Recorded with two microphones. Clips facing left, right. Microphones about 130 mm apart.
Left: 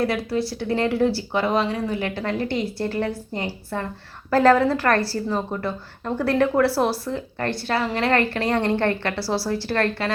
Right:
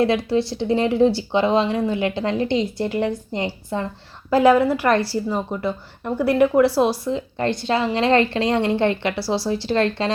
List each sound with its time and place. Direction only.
0.0 s speech: 20° right (ahead or behind)